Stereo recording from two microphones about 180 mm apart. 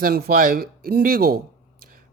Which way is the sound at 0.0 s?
60° right (ahead or behind).